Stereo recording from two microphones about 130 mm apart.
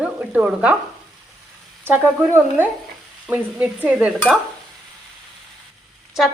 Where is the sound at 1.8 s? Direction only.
15° right (ahead or behind).